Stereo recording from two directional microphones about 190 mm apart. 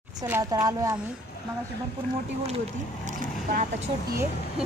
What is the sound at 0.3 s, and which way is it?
Speech, 20° right (ahead or behind).